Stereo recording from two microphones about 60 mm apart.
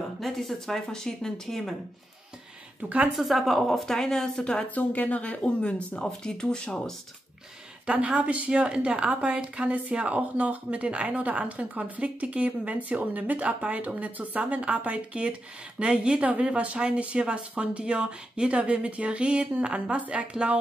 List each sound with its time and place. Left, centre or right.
0.2 s speech: centre
3.2 s speech: centre
4.6 s speech: left; by 7.0 s centre
7.8 s a woman's voice: centre